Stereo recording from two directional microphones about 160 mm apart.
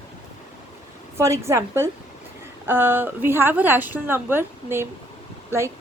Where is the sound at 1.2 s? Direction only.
20° right (ahead or behind).